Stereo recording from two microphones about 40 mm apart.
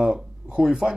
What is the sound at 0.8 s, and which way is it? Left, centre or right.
Speech, right.